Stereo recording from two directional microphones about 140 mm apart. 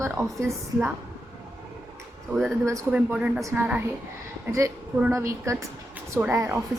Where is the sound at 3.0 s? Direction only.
10° right (ahead or behind).